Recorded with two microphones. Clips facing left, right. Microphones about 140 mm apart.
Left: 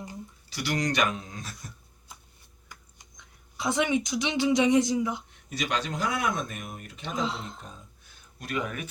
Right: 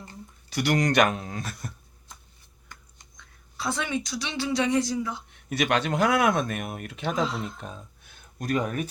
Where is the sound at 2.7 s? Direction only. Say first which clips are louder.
Right 1 dB; 15° left (ahead or behind).